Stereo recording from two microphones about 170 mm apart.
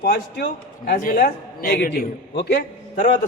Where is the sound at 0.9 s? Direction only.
55° left (ahead or behind); by 2.6 s 85° left.